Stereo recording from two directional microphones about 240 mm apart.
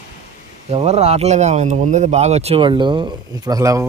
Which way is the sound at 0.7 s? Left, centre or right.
Right.